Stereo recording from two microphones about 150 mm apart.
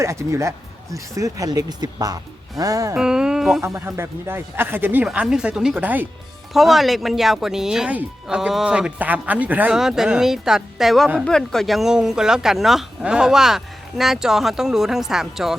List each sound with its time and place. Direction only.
0.0 s speech: 20° right (ahead or behind)
2.9 s music: 5° right (ahead or behind)
3.6 s speech: 15° right (ahead or behind)